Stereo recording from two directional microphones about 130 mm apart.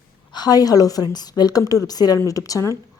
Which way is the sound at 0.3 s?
30° left (ahead or behind).